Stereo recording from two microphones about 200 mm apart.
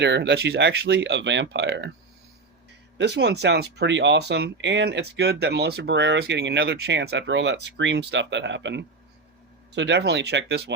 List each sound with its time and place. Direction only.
0.0 s speech: 60° right (ahead or behind)
3.0 s speech: 60° right (ahead or behind)